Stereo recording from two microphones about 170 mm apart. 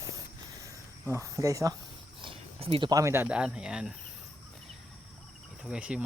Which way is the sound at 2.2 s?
35° right (ahead or behind).